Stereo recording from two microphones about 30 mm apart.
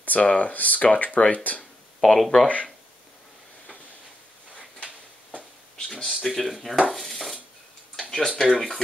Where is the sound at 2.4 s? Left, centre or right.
Left.